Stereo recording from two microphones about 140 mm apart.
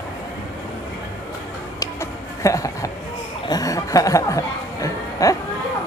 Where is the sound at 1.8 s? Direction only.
20° left (ahead or behind).